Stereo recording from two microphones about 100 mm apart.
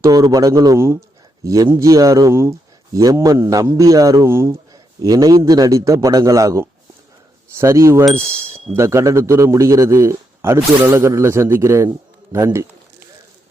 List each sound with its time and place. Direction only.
0.0 s speech: 35° right (ahead or behind)
4.7 s a sound: 40° right (ahead or behind)
5.5 s a man's voice: 35° right (ahead or behind)